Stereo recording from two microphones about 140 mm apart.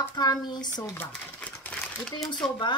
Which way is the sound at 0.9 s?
10° left (ahead or behind).